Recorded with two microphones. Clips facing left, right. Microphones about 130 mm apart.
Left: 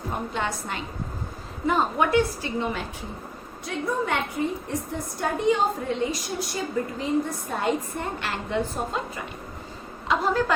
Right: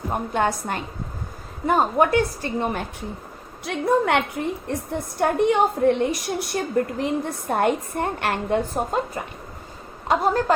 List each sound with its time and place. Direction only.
0.1 s a woman's voice: 50° right (ahead or behind)
3.6 s a woman's voice: 70° right (ahead or behind); by 10.5 s 45° right (ahead or behind)